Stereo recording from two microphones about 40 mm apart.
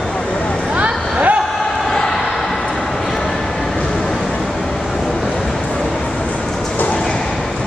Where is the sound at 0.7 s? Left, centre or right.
Right.